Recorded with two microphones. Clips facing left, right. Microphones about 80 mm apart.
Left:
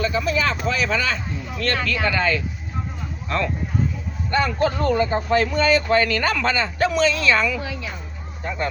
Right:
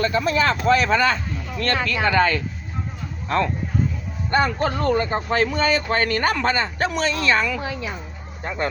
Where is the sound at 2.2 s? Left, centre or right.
Right.